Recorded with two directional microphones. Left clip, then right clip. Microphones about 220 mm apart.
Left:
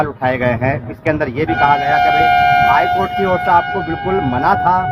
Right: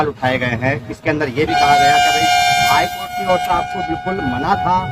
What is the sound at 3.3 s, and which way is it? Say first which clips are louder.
Speech: left 2 dB; 35° left (ahead or behind).